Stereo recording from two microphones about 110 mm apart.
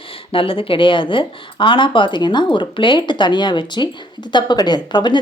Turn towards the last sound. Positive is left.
turn(degrees=45)  # may be behind; listen again after turning